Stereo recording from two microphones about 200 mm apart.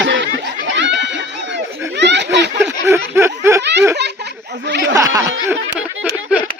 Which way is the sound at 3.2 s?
15° right (ahead or behind).